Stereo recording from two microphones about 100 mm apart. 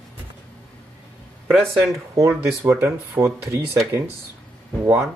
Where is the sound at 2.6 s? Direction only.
25° right (ahead or behind).